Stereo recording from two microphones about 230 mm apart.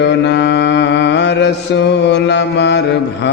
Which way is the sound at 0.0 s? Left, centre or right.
Left.